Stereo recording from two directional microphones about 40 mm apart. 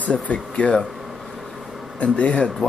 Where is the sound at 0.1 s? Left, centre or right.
Left.